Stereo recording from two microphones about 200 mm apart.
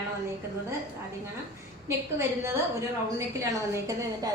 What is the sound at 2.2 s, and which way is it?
A woman's voice, 15° right (ahead or behind).